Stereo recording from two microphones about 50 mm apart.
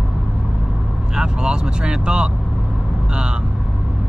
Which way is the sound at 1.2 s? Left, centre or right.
Centre.